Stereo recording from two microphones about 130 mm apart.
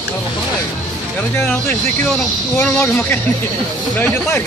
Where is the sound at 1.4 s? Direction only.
10° left (ahead or behind).